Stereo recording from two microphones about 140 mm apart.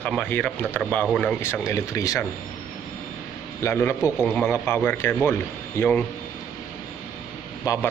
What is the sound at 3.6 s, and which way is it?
A man's voice, 20° left (ahead or behind).